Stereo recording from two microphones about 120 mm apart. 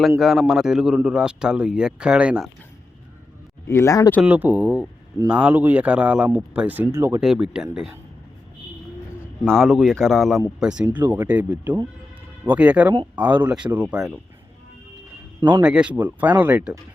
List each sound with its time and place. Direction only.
0.2 s a man's voice: centre (ahead or behind)
3.7 s speech: 25° left (ahead or behind)
4.2 s speech: 15° right (ahead or behind)
6.8 s speech: 25° right (ahead or behind)
7.2 s speech: 5° right (ahead or behind)
9.5 s a man's voice: centre (ahead or behind)
10.9 s speech: 15° right (ahead or behind)
15.4 s a man's voice: 40° right (ahead or behind)
15.6 s speech: 10° right (ahead or behind)